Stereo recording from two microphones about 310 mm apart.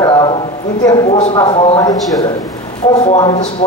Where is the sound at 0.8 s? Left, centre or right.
Centre.